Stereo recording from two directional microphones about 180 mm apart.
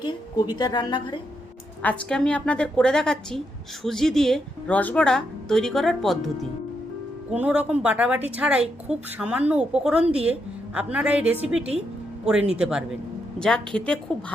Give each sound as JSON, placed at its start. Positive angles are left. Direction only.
{"t": 0.0, "sound": "a woman's voice", "side_deg": 25}
{"t": 1.8, "sound": "a woman's voice", "side_deg": 5}